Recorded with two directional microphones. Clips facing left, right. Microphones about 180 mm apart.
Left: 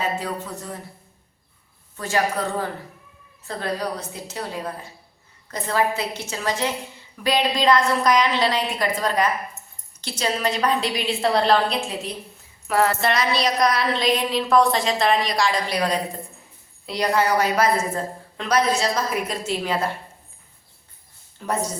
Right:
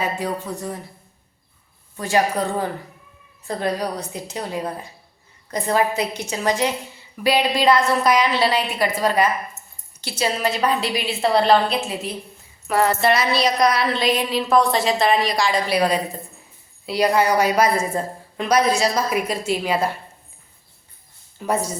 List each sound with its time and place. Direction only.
0.0 s a woman's voice: 15° right (ahead or behind)
2.0 s a woman's voice: 15° right (ahead or behind)
10.0 s music: 10° right (ahead or behind)
16.8 s a woman's voice: 5° right (ahead or behind)
21.4 s a woman's voice: 10° right (ahead or behind)